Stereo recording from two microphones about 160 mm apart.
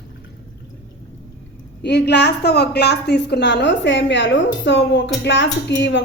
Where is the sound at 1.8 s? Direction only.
90° left.